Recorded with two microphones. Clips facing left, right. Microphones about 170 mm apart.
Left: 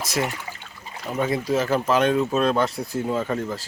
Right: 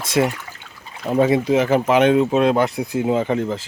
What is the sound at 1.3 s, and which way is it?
Speech, 20° right (ahead or behind).